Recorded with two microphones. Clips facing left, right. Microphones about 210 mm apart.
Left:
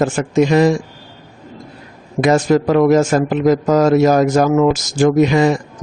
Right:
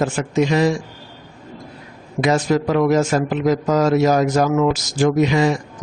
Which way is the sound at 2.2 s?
50° left (ahead or behind).